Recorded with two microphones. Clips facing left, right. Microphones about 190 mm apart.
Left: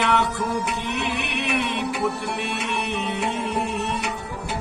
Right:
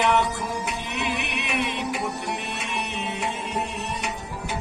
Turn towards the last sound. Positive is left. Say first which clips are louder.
# left 4 dB
turn(degrees=60)  # may be behind; listen again after turning